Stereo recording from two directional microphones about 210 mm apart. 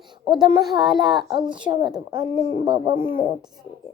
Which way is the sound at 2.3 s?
30° left (ahead or behind).